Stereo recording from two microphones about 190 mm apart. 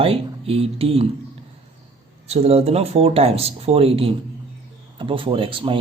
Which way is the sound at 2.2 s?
35° right (ahead or behind).